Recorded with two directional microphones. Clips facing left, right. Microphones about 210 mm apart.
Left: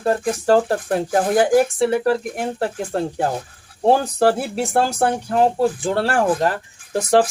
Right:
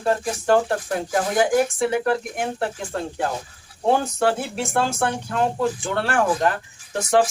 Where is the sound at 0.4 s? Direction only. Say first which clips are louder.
Left 2 dB; 35° left (ahead or behind).